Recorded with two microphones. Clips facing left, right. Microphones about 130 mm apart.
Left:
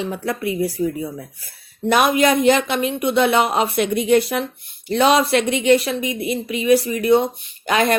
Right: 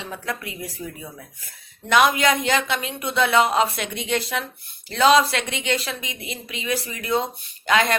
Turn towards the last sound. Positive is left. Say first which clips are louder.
# left 3 dB
turn(degrees=30)  # may be behind; listen again after turning